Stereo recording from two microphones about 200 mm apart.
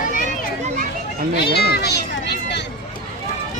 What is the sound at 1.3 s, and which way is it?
Children playing, 55° left (ahead or behind).